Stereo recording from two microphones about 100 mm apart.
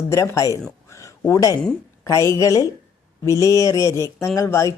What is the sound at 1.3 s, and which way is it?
Speech, 35° left (ahead or behind).